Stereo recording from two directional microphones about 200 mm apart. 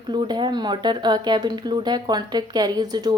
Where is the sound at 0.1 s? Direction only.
20° right (ahead or behind).